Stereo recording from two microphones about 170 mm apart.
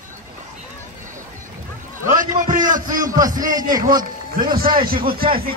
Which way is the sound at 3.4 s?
20° right (ahead or behind).